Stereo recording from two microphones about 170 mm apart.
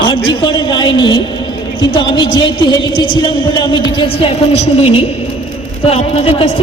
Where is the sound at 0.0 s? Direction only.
25° left (ahead or behind).